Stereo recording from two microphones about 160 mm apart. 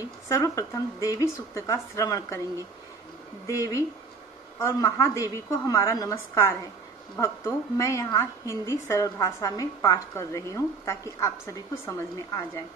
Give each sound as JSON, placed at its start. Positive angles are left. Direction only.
{"t": 0.3, "sound": "a woman's voice", "side_deg": 20}